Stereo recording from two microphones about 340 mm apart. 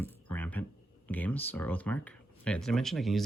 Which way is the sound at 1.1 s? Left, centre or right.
Centre.